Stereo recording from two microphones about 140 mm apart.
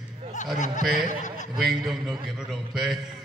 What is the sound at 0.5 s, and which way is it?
Speech, 60° left (ahead or behind).